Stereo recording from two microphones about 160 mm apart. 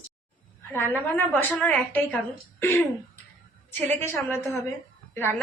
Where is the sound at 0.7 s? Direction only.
10° left (ahead or behind).